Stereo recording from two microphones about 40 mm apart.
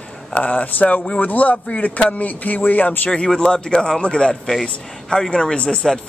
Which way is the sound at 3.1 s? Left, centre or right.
Left.